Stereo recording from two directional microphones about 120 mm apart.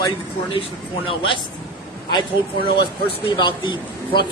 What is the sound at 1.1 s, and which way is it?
Speech, 45° left (ahead or behind).